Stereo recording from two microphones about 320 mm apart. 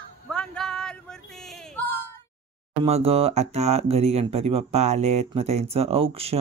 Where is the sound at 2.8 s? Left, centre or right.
Centre.